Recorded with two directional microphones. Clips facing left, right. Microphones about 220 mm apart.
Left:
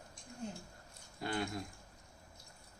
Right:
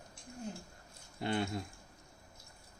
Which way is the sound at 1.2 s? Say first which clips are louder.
Right 3 dB; 25° right (ahead or behind).